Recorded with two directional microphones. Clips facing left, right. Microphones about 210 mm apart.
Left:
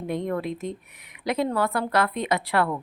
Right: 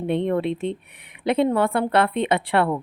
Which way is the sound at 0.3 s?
30° right (ahead or behind).